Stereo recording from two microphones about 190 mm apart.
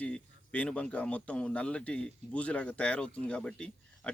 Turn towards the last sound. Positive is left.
turn(degrees=5)  # may be behind; listen again after turning